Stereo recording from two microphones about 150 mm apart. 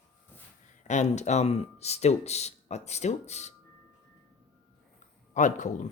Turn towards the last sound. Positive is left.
turn(degrees=55)  # may be behind; listen again after turning